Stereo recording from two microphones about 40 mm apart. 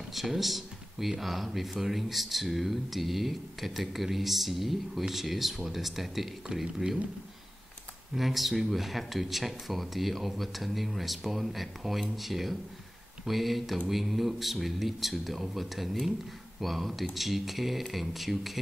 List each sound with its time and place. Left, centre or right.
0.1 s speech: centre
8.1 s speech: centre